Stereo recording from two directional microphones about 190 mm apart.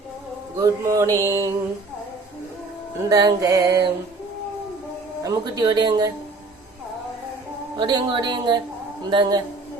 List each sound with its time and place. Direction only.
0.6 s mantra: 15° right (ahead or behind)
3.1 s speech: 20° right (ahead or behind)
5.2 s speech: 20° right (ahead or behind)
7.8 s speech: 20° right (ahead or behind)